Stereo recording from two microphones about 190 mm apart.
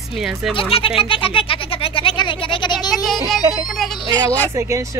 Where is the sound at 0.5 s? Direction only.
30° left (ahead or behind).